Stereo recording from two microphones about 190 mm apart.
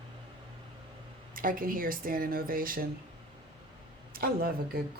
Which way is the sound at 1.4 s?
45° right (ahead or behind).